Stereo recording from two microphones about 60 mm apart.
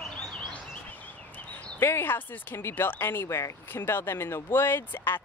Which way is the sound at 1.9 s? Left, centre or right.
Left.